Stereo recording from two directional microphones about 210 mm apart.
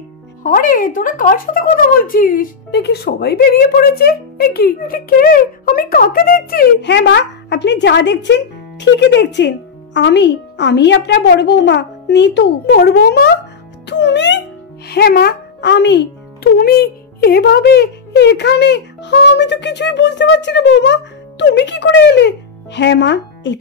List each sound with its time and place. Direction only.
0.4 s speech: 40° left (ahead or behind)
13.8 s music: 55° left (ahead or behind)
14.9 s speech: 50° left (ahead or behind)
16.5 s speech: 45° left (ahead or behind)